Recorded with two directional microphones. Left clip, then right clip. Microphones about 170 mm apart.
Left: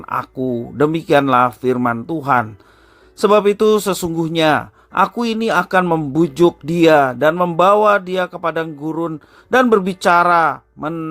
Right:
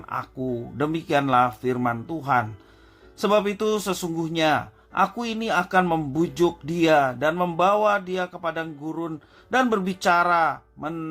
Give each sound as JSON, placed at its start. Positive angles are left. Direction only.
{"t": 0.0, "sound": "speech", "side_deg": 40}